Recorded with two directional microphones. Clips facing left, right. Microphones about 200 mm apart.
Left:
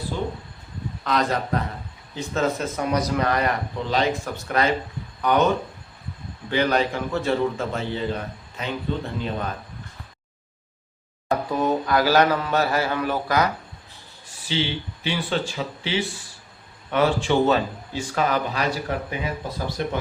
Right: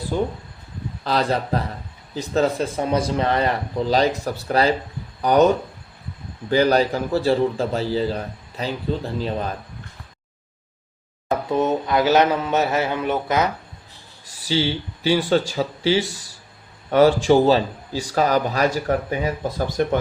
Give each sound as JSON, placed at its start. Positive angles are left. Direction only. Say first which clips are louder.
{"t": 0.1, "sound": "speech", "louder": "right 6 dB", "side_deg": -45}
{"t": 1.0, "sound": "speech", "louder": "right 2 dB", "side_deg": -30}
{"t": 6.5, "sound": "speech", "louder": "right 4 dB", "side_deg": -35}
{"t": 11.3, "sound": "speech", "louder": "right 2 dB", "side_deg": -25}
{"t": 14.4, "sound": "speech", "louder": "right 4 dB", "side_deg": -40}